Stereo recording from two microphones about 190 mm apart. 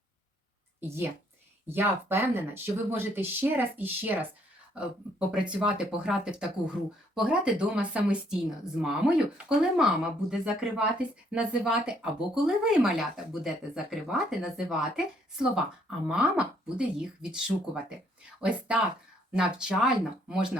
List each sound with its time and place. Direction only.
0.8 s speech: 10° right (ahead or behind)
5.5 s speech: 5° right (ahead or behind)